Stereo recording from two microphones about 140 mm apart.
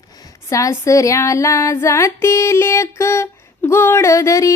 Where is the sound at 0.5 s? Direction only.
20° left (ahead or behind).